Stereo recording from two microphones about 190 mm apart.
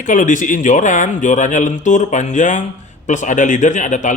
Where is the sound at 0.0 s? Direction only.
40° left (ahead or behind).